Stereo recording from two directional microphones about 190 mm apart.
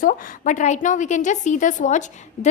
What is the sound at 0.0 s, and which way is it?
A woman's voice, 45° left (ahead or behind).